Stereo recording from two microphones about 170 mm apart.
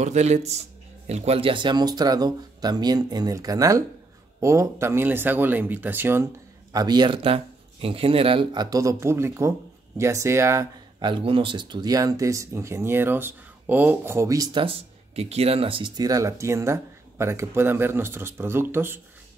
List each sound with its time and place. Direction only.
0.0 s speech: 40° right (ahead or behind); by 18.9 s 15° right (ahead or behind)